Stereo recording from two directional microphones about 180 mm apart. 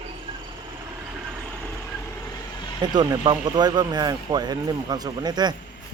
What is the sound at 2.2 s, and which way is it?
Vehicle, 25° left (ahead or behind).